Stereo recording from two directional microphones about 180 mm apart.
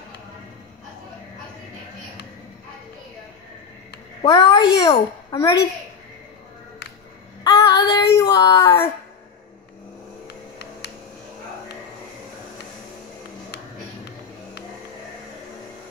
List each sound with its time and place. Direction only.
4.2 s a woman's voice: 20° left (ahead or behind)
7.4 s child singing: 25° left (ahead or behind)
10.2 s a sound: 65° left (ahead or behind)